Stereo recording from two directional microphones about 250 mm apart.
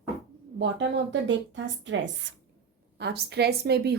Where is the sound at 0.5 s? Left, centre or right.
Right.